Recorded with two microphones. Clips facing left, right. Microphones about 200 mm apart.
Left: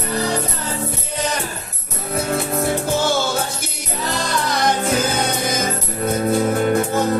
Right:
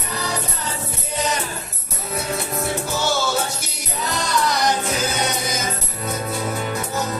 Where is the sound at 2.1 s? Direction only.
55° left (ahead or behind).